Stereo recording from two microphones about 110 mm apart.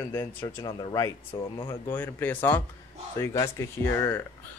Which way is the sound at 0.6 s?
35° left (ahead or behind).